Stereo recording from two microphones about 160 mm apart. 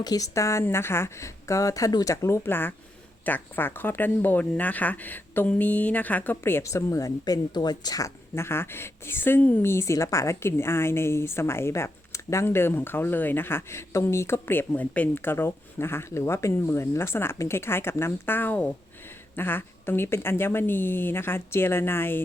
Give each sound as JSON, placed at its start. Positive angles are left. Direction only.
{"t": 0.0, "sound": "speech", "side_deg": 20}